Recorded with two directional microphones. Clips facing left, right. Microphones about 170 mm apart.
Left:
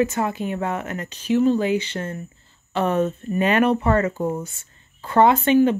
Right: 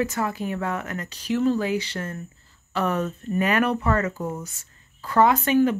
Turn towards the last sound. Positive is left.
turn(degrees=25)  # may be behind; listen again after turning